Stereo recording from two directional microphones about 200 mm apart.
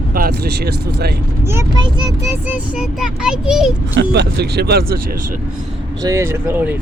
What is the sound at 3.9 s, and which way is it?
Speech, 55° right (ahead or behind).